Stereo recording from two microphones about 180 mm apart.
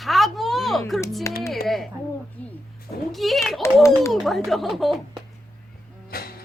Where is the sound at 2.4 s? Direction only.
10° left (ahead or behind).